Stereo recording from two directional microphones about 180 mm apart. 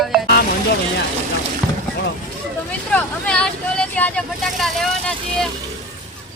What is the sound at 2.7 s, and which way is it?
Speech, 5° left (ahead or behind).